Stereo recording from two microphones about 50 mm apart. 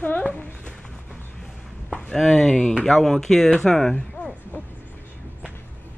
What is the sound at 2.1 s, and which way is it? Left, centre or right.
Speech, centre.